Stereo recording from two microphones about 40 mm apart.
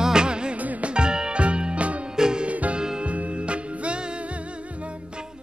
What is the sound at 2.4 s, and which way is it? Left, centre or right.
Music, right.